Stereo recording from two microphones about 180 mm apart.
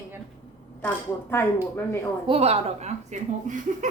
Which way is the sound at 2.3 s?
35° right (ahead or behind).